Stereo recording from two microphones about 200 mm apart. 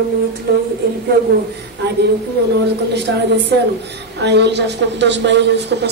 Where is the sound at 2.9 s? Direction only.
55° right (ahead or behind).